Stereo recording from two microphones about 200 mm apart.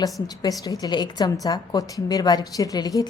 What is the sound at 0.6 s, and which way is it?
A woman's voice, 20° left (ahead or behind).